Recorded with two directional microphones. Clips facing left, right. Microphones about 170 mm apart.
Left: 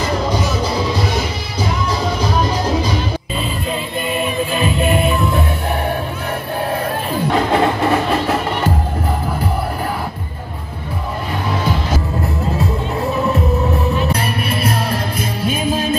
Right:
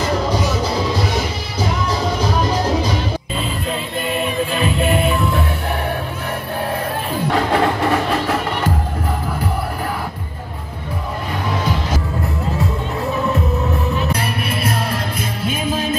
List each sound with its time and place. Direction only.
4.0 s music: 10° left (ahead or behind)
7.3 s music: 25° left (ahead or behind)